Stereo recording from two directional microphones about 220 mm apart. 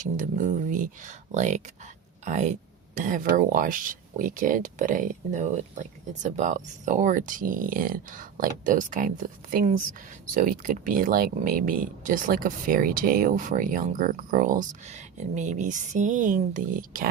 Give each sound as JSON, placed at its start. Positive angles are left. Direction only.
{"t": 0.0, "sound": "speech", "side_deg": -35}